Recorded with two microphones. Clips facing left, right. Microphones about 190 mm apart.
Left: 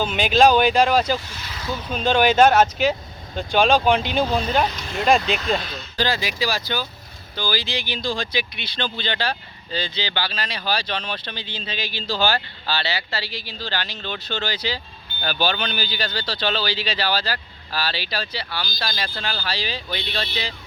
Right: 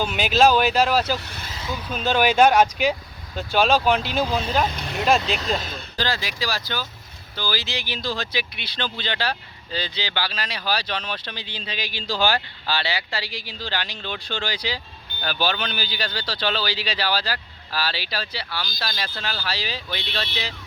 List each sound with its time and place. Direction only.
0.0 s speech: 5° right (ahead or behind)
6.5 s speech: 20° left (ahead or behind)
7.3 s speech: 5° right (ahead or behind)